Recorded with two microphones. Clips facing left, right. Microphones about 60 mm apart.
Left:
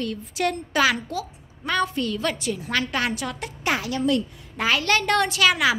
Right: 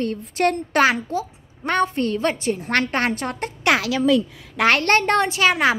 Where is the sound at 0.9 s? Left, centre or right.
Right.